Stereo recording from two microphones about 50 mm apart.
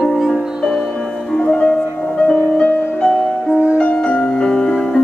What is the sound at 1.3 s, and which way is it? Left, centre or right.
Music, centre.